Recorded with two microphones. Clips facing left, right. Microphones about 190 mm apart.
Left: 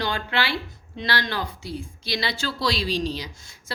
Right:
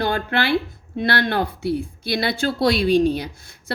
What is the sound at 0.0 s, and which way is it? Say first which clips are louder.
Speech: right 5 dB; 55° right (ahead or behind).